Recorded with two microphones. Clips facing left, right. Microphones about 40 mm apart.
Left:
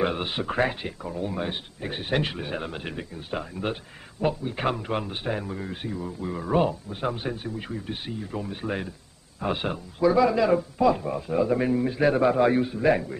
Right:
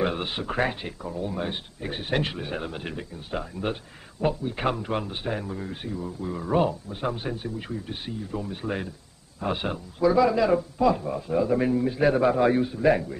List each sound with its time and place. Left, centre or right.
0.0 s a man's voice: centre